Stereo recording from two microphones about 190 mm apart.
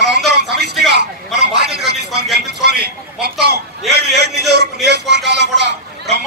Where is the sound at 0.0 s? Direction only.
60° right (ahead or behind).